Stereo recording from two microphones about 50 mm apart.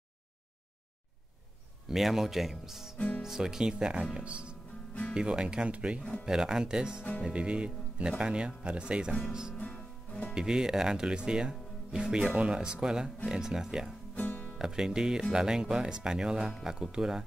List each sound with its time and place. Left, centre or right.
1.9 s speech: centre
9.6 s music: left
10.3 s speech: centre
14.1 s music: left
14.6 s speech: centre